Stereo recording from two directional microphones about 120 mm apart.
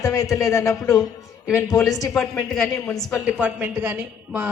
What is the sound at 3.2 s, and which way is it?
A woman's voice, 10° right (ahead or behind).